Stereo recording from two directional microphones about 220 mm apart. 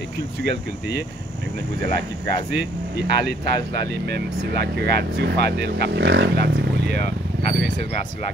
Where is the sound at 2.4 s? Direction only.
55° right (ahead or behind).